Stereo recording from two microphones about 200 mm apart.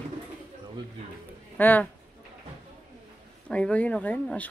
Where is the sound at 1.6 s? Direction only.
10° left (ahead or behind).